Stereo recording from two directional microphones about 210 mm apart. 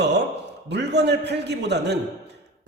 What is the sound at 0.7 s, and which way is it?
A man's voice, 55° right (ahead or behind).